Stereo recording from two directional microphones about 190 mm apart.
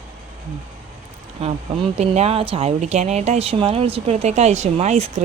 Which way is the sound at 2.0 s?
35° right (ahead or behind).